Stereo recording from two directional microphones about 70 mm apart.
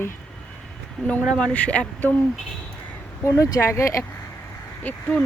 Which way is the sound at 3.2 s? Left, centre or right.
Left.